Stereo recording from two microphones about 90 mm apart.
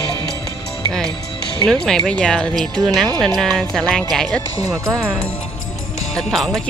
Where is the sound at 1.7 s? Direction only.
5° left (ahead or behind).